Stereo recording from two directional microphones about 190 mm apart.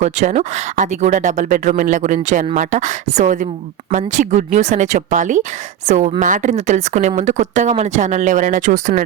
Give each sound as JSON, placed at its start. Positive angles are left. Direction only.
{"t": 0.0, "sound": "speech", "side_deg": -35}